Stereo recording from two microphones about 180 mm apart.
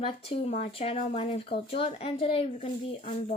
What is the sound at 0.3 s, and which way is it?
Speech, 35° left (ahead or behind).